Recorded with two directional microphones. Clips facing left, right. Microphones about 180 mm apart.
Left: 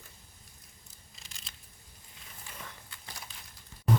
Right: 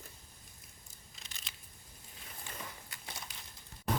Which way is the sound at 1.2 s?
Centre (ahead or behind).